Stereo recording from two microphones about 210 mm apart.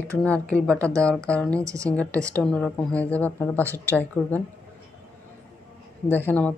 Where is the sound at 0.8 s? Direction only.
15° right (ahead or behind).